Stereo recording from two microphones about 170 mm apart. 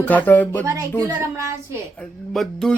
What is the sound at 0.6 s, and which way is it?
Speech, 20° right (ahead or behind).